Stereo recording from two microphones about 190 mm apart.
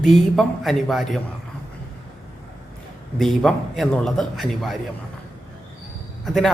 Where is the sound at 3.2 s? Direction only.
5° left (ahead or behind).